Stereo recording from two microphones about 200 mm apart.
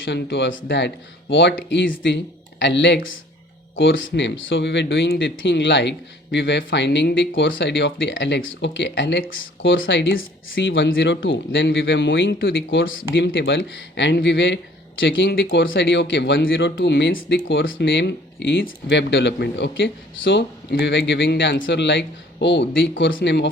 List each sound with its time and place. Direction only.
0.0 s speech: 65° left (ahead or behind)
10.2 s speech: 45° left (ahead or behind)
10.7 s speech: 70° left (ahead or behind)